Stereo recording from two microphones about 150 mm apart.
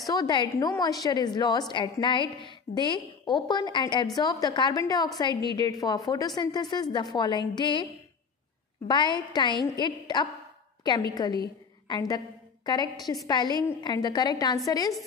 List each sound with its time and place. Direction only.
0.0 s a woman's voice: 25° left (ahead or behind)